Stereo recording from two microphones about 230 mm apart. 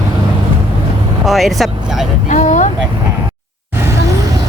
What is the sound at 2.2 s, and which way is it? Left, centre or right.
Speech, left.